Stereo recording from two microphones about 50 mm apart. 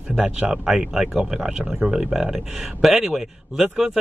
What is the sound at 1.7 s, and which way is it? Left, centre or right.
Speech, right.